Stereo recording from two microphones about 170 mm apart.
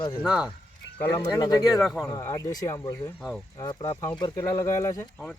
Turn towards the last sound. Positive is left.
turn(degrees=15)  # may be behind; listen again after turning